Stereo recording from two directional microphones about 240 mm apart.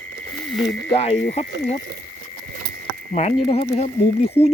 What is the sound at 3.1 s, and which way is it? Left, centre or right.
Speech, left.